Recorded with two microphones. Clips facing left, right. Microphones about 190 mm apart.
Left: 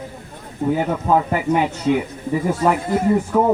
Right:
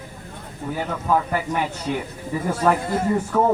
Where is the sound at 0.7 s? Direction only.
25° left (ahead or behind).